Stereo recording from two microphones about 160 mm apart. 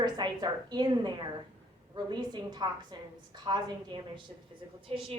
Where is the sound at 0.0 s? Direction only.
25° right (ahead or behind).